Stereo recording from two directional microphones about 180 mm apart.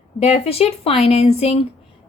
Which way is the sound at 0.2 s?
35° left (ahead or behind).